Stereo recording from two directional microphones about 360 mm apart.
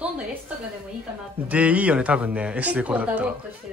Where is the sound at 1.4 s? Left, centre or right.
Centre.